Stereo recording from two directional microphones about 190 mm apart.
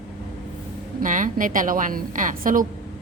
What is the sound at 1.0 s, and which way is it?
A woman's voice, 45° right (ahead or behind).